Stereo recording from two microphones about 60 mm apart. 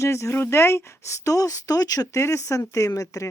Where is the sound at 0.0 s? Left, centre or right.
Left.